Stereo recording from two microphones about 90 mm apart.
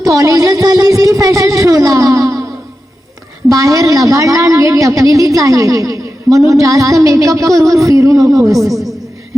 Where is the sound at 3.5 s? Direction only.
40° right (ahead or behind).